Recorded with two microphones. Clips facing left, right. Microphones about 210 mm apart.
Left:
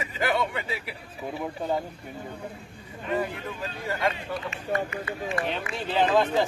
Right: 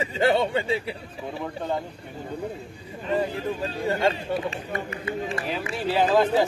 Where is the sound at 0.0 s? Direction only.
30° right (ahead or behind).